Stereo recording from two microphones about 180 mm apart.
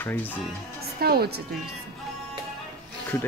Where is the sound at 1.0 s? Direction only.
60° right (ahead or behind).